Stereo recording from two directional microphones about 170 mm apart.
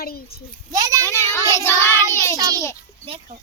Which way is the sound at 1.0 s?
15° left (ahead or behind).